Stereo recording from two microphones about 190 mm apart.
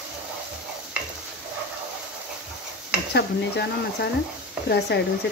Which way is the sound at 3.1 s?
60° left (ahead or behind).